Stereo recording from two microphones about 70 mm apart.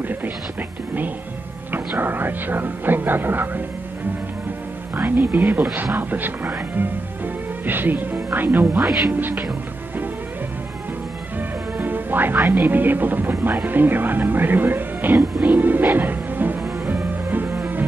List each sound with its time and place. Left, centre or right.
0.0 s speech: right
4.9 s speech: right
11.3 s speech: right
15.4 s music: right